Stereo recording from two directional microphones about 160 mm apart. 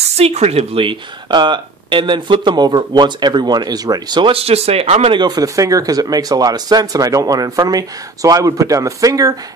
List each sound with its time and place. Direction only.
0.2 s speech: 40° right (ahead or behind)
5.1 s speech: 25° right (ahead or behind)